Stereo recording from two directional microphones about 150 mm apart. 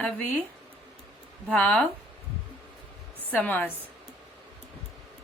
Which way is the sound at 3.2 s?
10° left (ahead or behind).